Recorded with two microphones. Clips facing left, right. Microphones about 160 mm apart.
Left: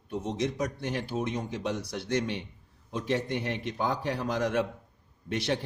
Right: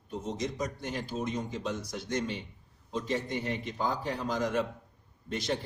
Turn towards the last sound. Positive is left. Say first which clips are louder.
# left 3 dB
turn(degrees=65)  # may be behind; listen again after turning